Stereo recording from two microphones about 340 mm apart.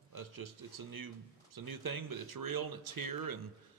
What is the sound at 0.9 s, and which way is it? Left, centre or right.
Speech, right.